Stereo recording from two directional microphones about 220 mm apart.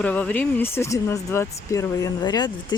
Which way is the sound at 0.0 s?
5° left (ahead or behind).